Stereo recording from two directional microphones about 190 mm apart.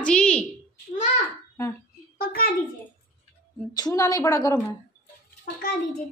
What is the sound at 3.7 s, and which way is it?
Speech, 20° left (ahead or behind).